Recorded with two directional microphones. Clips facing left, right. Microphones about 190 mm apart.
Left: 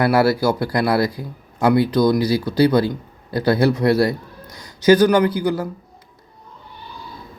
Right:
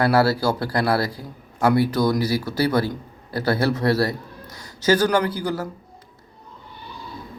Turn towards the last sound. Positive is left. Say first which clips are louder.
# left 5 dB
turn(degrees=15)  # may be behind; listen again after turning